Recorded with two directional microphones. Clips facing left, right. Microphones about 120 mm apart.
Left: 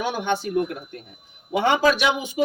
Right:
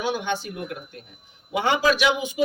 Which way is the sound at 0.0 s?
50° left (ahead or behind).